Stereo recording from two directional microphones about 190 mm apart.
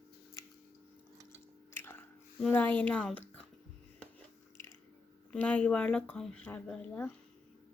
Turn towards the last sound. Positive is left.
turn(degrees=5)  # may be behind; listen again after turning